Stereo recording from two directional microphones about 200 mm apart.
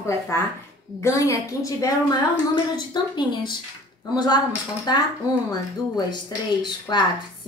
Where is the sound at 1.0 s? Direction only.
15° left (ahead or behind).